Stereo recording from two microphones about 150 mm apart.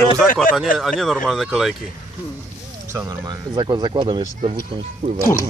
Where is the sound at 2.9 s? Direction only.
25° right (ahead or behind); by 5.2 s 45° right (ahead or behind).